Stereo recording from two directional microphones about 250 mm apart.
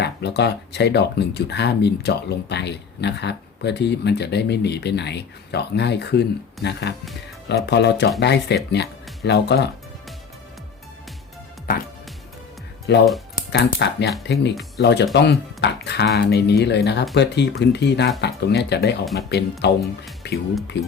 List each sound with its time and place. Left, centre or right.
0.0 s speech: left
12.9 s speech: left
20.2 s music: left
20.7 s speech: left